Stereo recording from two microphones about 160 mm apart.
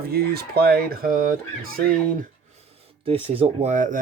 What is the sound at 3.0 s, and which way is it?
Speech, 35° right (ahead or behind).